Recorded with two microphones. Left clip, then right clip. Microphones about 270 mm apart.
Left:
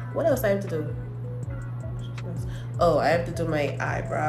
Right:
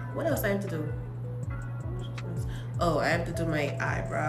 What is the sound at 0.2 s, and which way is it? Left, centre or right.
Speech, centre.